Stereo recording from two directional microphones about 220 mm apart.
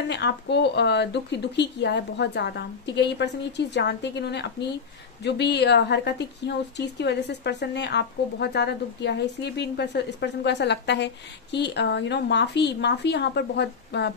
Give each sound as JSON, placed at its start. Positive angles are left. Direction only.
{"t": 0.1, "sound": "speech", "side_deg": 50}